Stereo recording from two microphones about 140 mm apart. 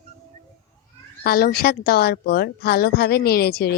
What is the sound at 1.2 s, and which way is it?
A woman's voice, 90° left.